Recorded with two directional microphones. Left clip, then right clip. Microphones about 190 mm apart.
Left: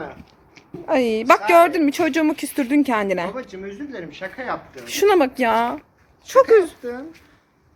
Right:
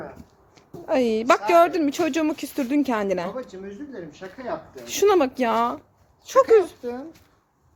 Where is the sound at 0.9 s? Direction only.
Centre (ahead or behind).